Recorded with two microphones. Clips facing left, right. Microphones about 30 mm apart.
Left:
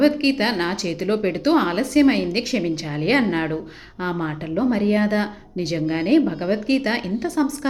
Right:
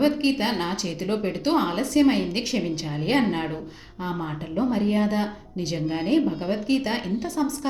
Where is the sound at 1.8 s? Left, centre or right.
Centre.